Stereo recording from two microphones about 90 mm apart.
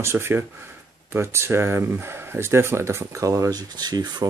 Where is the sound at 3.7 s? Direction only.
50° right (ahead or behind).